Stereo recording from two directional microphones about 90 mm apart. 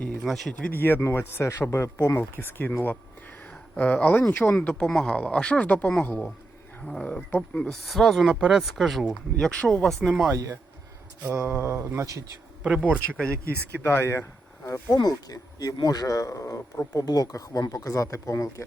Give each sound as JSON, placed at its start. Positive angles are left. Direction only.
{"t": 0.3, "sound": "speech", "side_deg": 5}
{"t": 0.8, "sound": "speech", "side_deg": 25}
{"t": 10.3, "sound": "speech", "side_deg": -40}
{"t": 11.2, "sound": "mantra", "side_deg": -15}
{"t": 11.6, "sound": "speech", "side_deg": -30}
{"t": 12.6, "sound": "mantra", "side_deg": -15}
{"t": 13.9, "sound": "speech", "side_deg": 30}